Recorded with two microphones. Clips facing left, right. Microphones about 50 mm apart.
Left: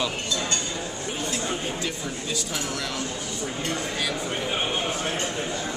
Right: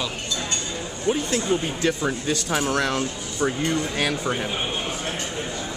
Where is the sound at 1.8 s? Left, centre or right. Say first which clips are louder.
Right 7 dB; right.